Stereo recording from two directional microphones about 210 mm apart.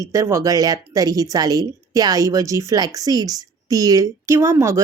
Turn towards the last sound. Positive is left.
turn(degrees=-15)  # may be behind; listen again after turning